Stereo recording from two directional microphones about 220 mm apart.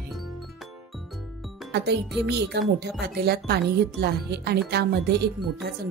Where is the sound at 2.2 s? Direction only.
50° right (ahead or behind).